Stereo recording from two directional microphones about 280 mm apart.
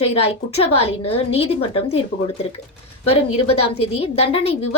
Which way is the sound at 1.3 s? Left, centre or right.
Left.